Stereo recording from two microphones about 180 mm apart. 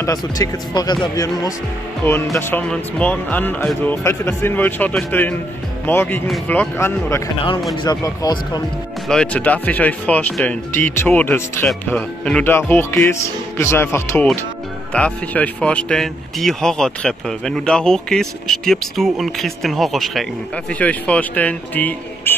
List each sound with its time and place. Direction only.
0.0 s speech: 20° left (ahead or behind)
2.3 s speech: 10° left (ahead or behind)
9.1 s speech: 5° left (ahead or behind)